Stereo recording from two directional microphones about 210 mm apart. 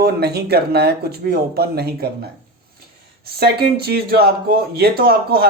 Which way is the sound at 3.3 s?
50° right (ahead or behind).